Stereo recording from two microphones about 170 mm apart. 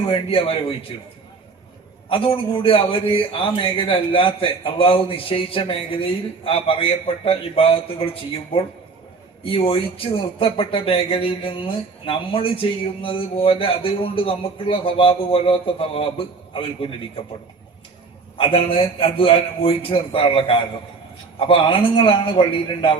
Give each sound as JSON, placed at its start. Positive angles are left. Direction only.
{"t": 0.1, "sound": "speech", "side_deg": 35}
{"t": 2.0, "sound": "speech", "side_deg": 30}
{"t": 18.3, "sound": "speech", "side_deg": 35}